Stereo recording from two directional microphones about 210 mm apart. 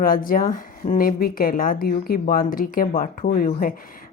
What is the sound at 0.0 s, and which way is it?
Speech, 45° left (ahead or behind).